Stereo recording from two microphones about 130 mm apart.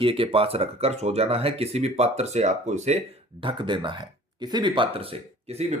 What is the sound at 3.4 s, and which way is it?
Speech, 40° right (ahead or behind).